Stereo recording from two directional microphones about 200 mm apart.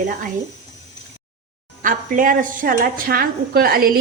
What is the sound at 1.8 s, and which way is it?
A woman's voice, 40° right (ahead or behind).